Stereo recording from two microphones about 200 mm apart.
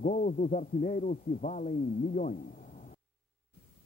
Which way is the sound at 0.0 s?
40° left (ahead or behind).